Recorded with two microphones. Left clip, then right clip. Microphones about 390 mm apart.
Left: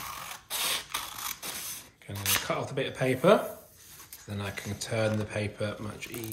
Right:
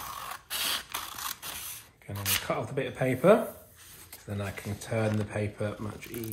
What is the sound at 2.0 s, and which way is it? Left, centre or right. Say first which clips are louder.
Speech: left 1 dB; centre.